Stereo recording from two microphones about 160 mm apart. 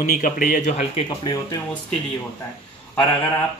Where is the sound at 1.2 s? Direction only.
20° left (ahead or behind).